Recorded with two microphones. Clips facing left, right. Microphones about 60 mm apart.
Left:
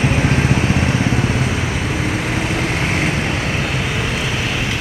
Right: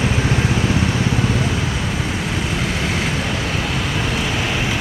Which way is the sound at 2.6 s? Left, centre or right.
Left.